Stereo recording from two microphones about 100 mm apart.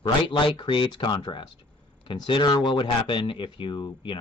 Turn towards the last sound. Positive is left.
turn(degrees=50)  # may be behind; listen again after turning